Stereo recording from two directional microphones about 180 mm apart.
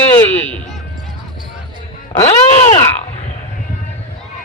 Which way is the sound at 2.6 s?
35° left (ahead or behind).